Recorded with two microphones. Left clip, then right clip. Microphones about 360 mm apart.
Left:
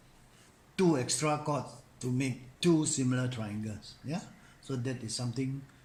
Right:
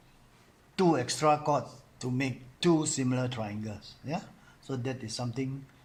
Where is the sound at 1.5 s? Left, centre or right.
Centre.